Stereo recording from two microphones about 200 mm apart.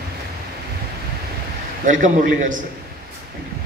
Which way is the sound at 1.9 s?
40° right (ahead or behind).